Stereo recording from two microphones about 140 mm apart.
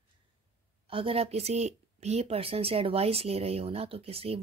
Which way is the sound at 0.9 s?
40° right (ahead or behind).